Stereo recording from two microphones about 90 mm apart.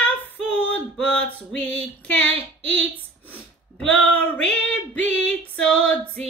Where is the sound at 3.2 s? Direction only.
20° left (ahead or behind).